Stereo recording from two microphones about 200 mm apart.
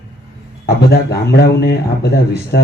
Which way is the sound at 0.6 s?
50° left (ahead or behind).